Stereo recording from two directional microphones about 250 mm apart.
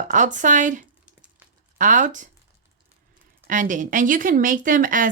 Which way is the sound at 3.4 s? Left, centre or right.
Right.